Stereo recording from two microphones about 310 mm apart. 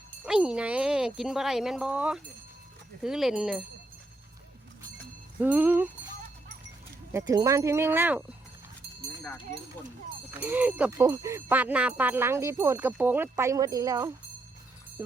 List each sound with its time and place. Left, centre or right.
0.3 s speech: centre
5.4 s speech: centre
7.1 s speech: centre
10.4 s speech: centre